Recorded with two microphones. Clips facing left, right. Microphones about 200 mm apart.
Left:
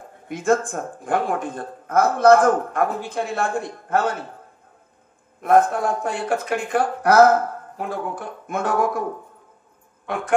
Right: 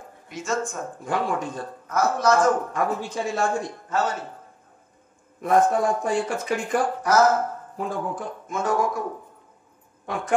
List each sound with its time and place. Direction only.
0.3 s speech: 55° left (ahead or behind)
5.4 s speech: 60° left (ahead or behind)